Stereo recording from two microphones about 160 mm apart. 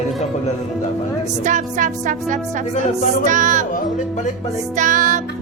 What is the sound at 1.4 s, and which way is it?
Music, 50° right (ahead or behind).